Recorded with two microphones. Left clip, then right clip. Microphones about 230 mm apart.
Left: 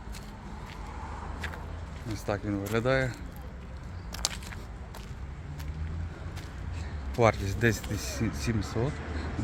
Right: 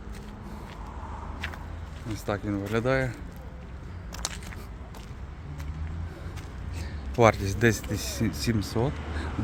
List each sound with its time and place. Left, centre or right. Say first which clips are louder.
2.0 s speech: right 2 dB; centre
4.1 s a sound: left 2 dB; centre
7.2 s speech: right 4 dB; centre